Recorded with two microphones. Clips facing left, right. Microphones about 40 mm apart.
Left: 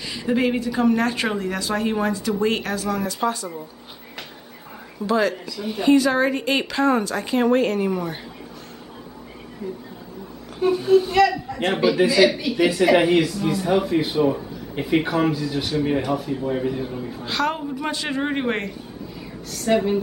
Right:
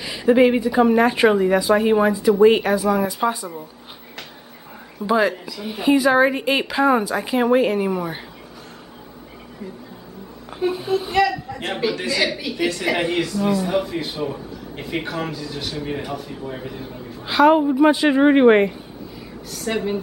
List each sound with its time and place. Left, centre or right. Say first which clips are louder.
0.0 s speech: right 7 dB; centre
5.0 s speech: right 2 dB; centre
10.6 s a woman's voice: left 5 dB; centre
17.3 s speech: right 10 dB; centre
19.5 s a woman's voice: left 4 dB; centre